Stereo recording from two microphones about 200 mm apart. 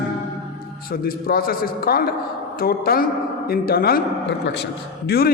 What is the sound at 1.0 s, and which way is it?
A man's voice, 45° left (ahead or behind).